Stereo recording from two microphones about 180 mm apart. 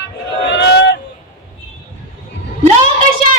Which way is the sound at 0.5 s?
75° left (ahead or behind).